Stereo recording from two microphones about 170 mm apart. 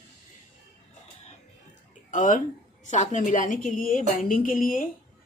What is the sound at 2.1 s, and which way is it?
Speech, 50° left (ahead or behind).